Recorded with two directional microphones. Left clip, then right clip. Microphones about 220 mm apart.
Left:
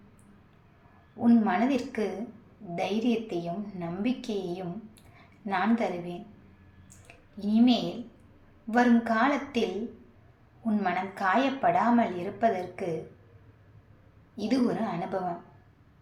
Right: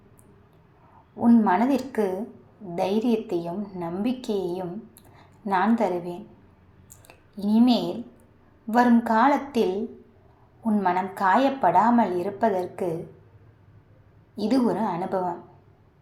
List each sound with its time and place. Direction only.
1.2 s a woman's voice: 10° right (ahead or behind)
7.3 s a woman's voice: 15° right (ahead or behind)
14.3 s a woman's voice: 15° right (ahead or behind)